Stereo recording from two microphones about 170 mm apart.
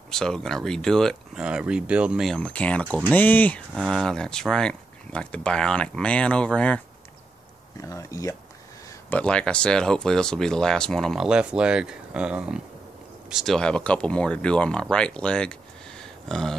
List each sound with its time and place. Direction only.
0.1 s speech: 5° left (ahead or behind)
3.7 s speech: centre (ahead or behind)
7.8 s speech: 20° left (ahead or behind)
8.8 s speech: 10° left (ahead or behind)